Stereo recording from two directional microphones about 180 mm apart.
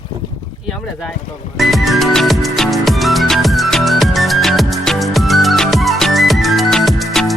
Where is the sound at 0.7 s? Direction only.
Centre (ahead or behind).